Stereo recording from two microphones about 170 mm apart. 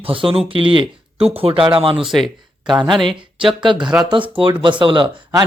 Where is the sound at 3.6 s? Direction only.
30° right (ahead or behind).